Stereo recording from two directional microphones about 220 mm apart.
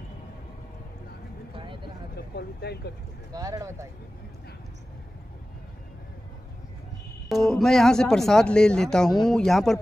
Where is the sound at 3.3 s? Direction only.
15° right (ahead or behind).